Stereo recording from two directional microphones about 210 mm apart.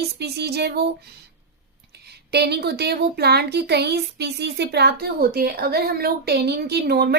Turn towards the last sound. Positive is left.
turn(degrees=-50)  # may be behind; listen again after turning